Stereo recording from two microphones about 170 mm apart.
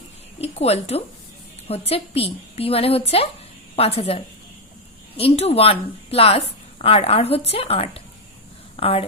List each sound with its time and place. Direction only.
0.4 s speech: 40° left (ahead or behind)